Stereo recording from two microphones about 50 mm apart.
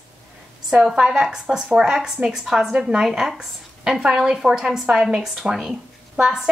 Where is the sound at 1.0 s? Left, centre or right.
Centre.